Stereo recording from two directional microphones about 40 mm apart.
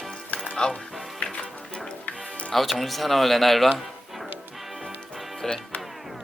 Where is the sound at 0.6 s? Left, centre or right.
Left.